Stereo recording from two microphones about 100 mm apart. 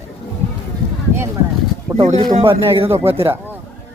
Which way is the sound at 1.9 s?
10° right (ahead or behind).